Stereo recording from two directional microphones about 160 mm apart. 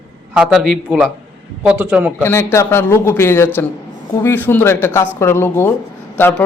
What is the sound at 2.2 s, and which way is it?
A man's voice, 15° left (ahead or behind).